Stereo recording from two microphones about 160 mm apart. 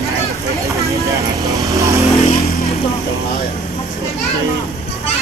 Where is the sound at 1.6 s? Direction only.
20° right (ahead or behind).